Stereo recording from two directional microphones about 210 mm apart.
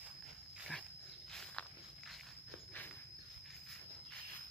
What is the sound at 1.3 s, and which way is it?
Walk, 5° left (ahead or behind).